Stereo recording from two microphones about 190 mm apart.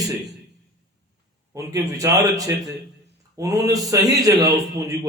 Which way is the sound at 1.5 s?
15° right (ahead or behind).